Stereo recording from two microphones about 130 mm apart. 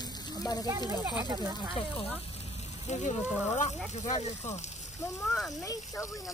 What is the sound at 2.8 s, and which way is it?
Speech, 65° left (ahead or behind).